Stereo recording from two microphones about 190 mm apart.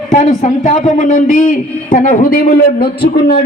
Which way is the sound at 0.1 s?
40° left (ahead or behind).